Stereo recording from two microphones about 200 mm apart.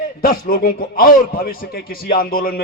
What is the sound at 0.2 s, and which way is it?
A man's voice, 45° left (ahead or behind).